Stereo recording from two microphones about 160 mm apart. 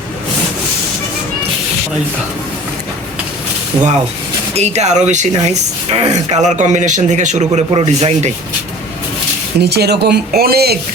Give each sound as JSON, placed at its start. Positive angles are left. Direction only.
{"t": 4.5, "sound": "speech", "side_deg": -45}
{"t": 9.6, "sound": "speech", "side_deg": -90}